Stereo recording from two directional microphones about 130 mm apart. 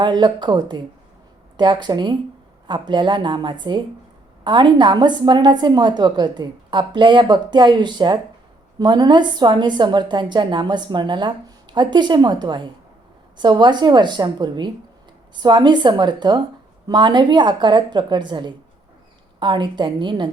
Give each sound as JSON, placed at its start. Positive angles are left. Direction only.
{"t": 0.0, "sound": "a woman's voice", "side_deg": -35}